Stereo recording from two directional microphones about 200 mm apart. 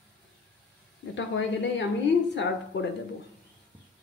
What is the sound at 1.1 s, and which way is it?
Speech, 65° left (ahead or behind).